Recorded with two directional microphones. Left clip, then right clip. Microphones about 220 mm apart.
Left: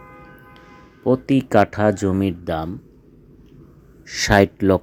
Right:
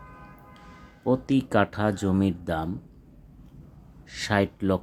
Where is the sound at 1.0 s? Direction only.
15° left (ahead or behind).